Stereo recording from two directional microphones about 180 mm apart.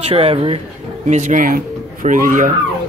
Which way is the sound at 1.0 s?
40° right (ahead or behind).